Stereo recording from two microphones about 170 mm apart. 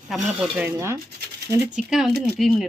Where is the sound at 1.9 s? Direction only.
Centre (ahead or behind).